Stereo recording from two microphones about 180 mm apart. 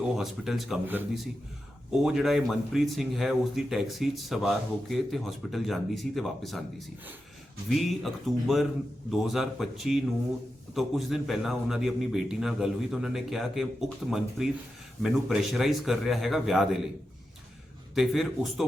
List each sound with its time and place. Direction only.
0.2 s speech: centre (ahead or behind)
17.9 s speech: centre (ahead or behind)